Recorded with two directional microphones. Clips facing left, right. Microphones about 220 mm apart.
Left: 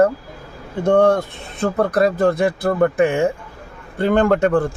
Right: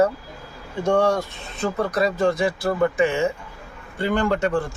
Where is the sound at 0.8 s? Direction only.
55° left (ahead or behind).